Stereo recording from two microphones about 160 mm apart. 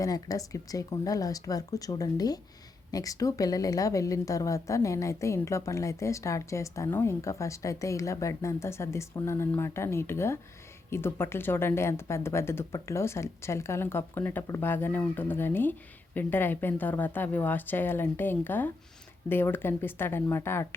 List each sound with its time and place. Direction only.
0.0 s a woman's voice: 20° left (ahead or behind)